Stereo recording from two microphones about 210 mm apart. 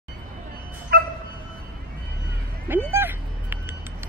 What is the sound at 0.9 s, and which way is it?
Dog, 45° right (ahead or behind).